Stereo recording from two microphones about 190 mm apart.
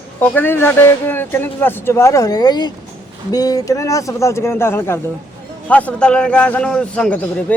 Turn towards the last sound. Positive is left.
turn(degrees=5)  # may be behind; listen again after turning